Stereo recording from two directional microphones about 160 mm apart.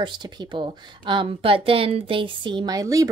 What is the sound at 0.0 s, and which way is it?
A woman's voice, 30° right (ahead or behind).